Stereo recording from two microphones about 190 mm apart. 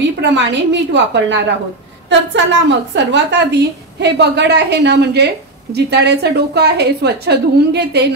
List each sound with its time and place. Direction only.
0.2 s a woman's voice: 65° right (ahead or behind)